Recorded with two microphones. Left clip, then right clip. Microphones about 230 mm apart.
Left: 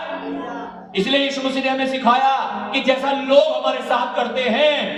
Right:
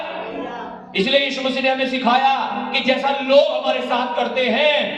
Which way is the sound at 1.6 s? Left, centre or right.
Left.